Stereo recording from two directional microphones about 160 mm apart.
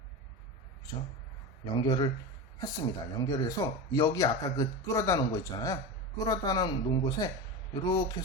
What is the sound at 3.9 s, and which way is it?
Speech, 25° left (ahead or behind).